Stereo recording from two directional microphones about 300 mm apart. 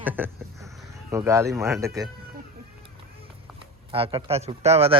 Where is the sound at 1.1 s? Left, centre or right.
Centre.